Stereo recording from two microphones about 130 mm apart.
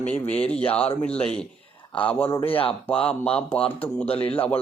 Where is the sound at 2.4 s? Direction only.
45° left (ahead or behind).